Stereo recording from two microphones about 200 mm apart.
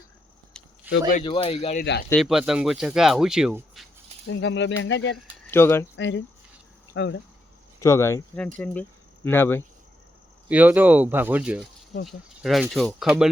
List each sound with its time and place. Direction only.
0.9 s speech: 10° right (ahead or behind)
1.2 s speech: 25° left (ahead or behind)
1.8 s speech: 55° left (ahead or behind)
2.1 s speech: centre (ahead or behind)
4.3 s a sound: 65° left (ahead or behind)
5.1 s speech: 10° left (ahead or behind)
6.0 s speech: 65° left (ahead or behind)
7.8 s speech: 15° left (ahead or behind)
10.5 s speech: 10° right (ahead or behind)